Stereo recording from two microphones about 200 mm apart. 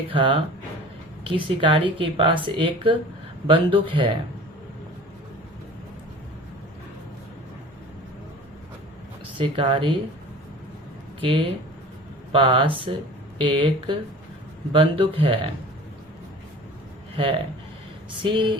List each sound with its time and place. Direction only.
0.1 s speech: 25° right (ahead or behind)
9.4 s speech: 25° right (ahead or behind)
11.2 s speech: 30° right (ahead or behind)
17.2 s speech: 25° right (ahead or behind)